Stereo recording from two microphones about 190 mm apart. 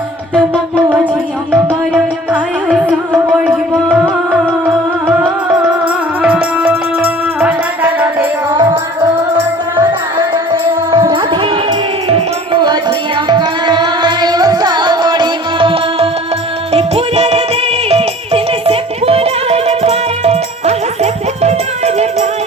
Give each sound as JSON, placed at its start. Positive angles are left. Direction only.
{"t": 2.8, "sound": "music", "side_deg": -5}
{"t": 6.2, "sound": "music", "side_deg": -10}
{"t": 10.5, "sound": "music", "side_deg": -25}